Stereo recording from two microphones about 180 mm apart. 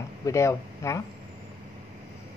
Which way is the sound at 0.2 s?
15° left (ahead or behind).